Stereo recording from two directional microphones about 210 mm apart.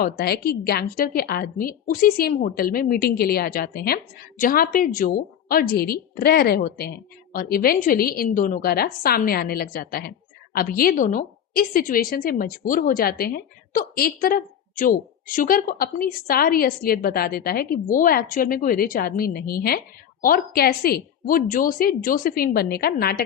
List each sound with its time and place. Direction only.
0.0 s a woman's voice: 45° left (ahead or behind)